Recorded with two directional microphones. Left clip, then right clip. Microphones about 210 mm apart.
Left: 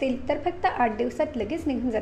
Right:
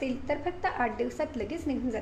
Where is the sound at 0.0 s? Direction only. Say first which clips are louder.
Left 5 dB; 15° left (ahead or behind).